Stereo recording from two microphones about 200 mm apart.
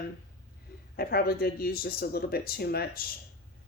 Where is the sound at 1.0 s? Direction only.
50° left (ahead or behind).